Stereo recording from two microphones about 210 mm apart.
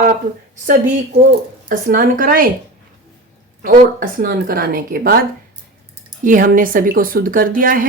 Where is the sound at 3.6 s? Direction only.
40° right (ahead or behind).